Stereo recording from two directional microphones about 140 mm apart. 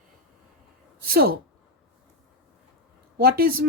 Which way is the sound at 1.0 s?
90° right.